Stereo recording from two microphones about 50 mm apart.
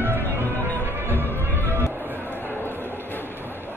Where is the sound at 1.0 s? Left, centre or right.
Right.